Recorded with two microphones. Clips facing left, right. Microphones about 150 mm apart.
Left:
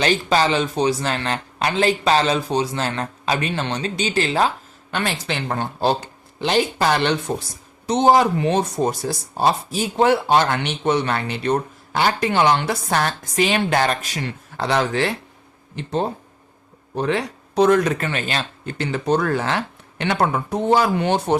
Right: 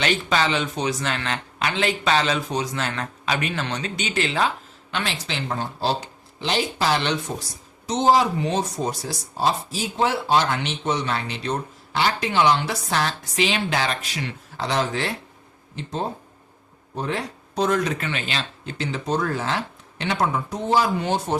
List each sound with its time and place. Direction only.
0.0 s a man's voice: 35° left (ahead or behind); by 21.3 s 65° left (ahead or behind)